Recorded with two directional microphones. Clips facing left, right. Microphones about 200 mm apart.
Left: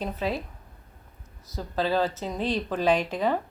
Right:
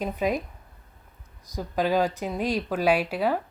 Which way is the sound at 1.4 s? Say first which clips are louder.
Right 2 dB; 15° right (ahead or behind).